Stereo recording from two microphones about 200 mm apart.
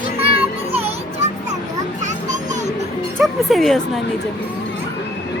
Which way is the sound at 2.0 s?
35° right (ahead or behind).